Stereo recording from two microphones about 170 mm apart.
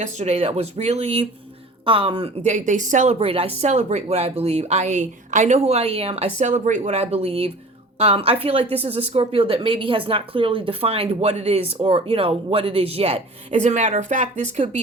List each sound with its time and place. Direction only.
0.0 s speech: 40° right (ahead or behind)